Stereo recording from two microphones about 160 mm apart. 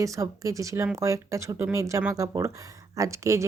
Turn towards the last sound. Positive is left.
turn(degrees=-20)  # may be behind; listen again after turning